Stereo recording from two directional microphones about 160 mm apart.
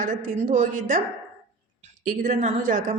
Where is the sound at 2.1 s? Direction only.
55° right (ahead or behind).